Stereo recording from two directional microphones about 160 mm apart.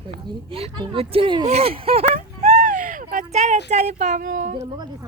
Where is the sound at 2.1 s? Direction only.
45° right (ahead or behind).